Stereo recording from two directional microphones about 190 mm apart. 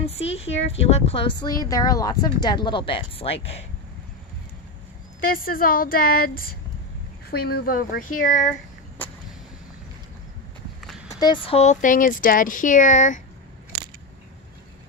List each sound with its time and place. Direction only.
0.0 s speech: 30° left (ahead or behind)
5.2 s a woman's voice: 50° left (ahead or behind)
11.1 s speech: 20° left (ahead or behind); by 13.2 s 40° left (ahead or behind)